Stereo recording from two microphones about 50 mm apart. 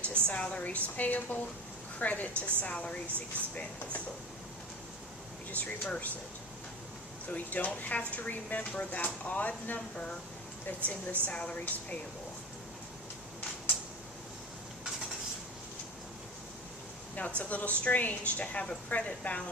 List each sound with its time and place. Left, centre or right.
0.0 s a woman's voice: left
5.5 s speech: left
7.3 s speech: left
11.3 s a woman's voice: left
11.6 s speech: left
17.2 s a woman's voice: left